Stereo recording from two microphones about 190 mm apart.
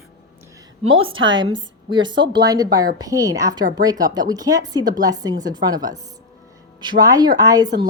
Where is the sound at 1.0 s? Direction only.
90° right.